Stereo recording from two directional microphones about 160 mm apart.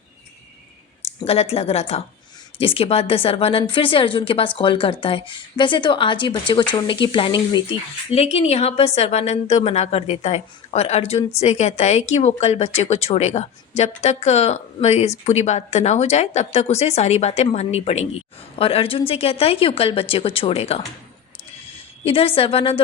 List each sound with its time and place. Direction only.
1.2 s a woman's voice: 40° left (ahead or behind)
22.0 s speech: 35° left (ahead or behind)